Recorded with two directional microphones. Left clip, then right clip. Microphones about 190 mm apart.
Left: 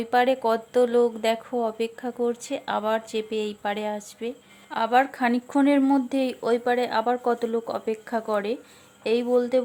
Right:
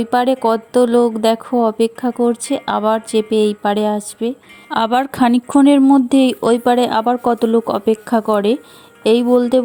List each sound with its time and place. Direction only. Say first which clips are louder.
0.0 s speech: right 7 dB; 30° right (ahead or behind)